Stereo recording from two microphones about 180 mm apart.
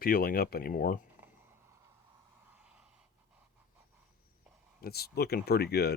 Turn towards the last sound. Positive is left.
turn(degrees=65)  # may be behind; listen again after turning